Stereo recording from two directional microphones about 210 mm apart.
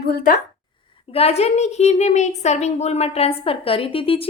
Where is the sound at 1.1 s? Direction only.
30° left (ahead or behind).